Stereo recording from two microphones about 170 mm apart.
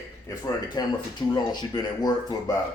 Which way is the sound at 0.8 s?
25° left (ahead or behind).